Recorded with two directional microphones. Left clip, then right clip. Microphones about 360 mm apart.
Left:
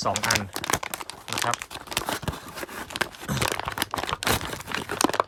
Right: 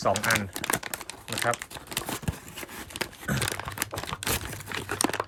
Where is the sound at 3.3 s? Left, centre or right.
Centre.